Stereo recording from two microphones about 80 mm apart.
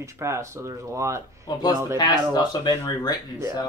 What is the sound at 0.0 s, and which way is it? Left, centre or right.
Speech, right.